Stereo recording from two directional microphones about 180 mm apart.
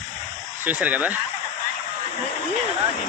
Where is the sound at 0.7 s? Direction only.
10° right (ahead or behind).